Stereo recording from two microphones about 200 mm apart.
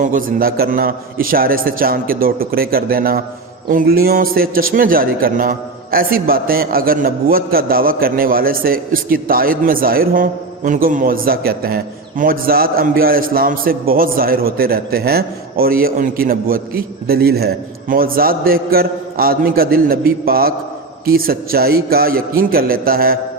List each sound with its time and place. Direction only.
0.0 s a man's voice: 45° right (ahead or behind)